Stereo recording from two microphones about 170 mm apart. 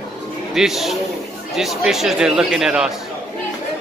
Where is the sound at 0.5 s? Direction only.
Centre (ahead or behind).